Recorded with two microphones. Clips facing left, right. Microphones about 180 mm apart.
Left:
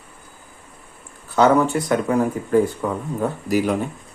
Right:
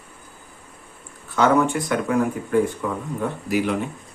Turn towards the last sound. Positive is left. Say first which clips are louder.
# left 2 dB
turn(degrees=40)  # may be behind; listen again after turning